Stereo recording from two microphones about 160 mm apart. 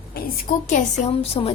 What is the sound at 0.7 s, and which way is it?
Speech, 55° left (ahead or behind).